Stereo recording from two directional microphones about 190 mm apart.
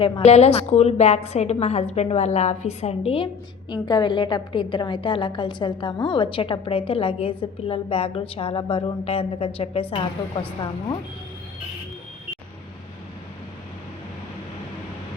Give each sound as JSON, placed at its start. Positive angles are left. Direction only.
{"t": 0.0, "sound": "a woman's voice", "side_deg": 35}